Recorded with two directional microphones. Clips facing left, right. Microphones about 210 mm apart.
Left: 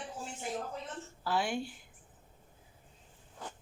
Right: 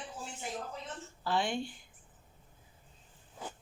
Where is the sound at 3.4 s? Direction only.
5° right (ahead or behind).